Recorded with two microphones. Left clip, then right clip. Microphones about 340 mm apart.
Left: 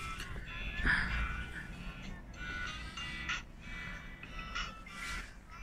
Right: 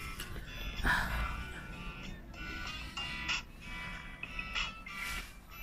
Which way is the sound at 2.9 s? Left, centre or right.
Centre.